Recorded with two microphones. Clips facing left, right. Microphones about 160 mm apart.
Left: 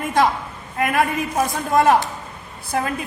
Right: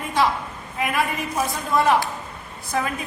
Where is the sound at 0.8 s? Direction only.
50° left (ahead or behind).